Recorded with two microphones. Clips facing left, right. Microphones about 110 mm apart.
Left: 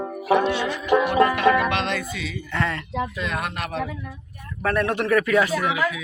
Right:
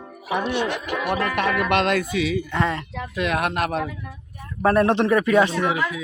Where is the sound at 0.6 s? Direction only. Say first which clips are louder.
Right 2 dB; 65° right (ahead or behind).